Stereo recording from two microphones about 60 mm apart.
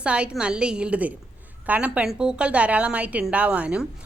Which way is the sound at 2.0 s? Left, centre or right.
Centre.